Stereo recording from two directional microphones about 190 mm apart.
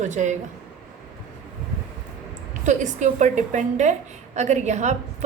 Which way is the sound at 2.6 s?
40° right (ahead or behind).